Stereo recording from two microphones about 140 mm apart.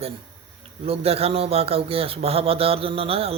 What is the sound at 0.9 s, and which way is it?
A man's voice, 45° right (ahead or behind).